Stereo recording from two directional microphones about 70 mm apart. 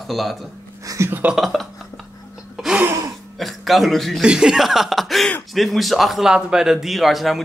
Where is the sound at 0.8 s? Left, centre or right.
Right.